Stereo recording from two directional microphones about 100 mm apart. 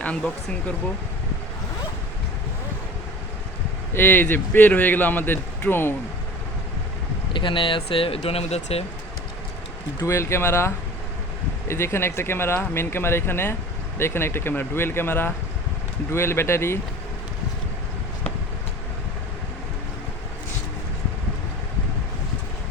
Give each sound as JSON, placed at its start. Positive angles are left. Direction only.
{"t": 0.0, "sound": "speech", "side_deg": 10}
{"t": 3.9, "sound": "a man's voice", "side_deg": 20}
{"t": 7.3, "sound": "speech", "side_deg": 55}
{"t": 10.0, "sound": "a man's voice", "side_deg": 30}
{"t": 11.7, "sound": "a man's voice", "side_deg": 25}